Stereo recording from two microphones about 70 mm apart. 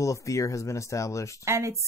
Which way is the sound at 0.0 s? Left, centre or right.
Left.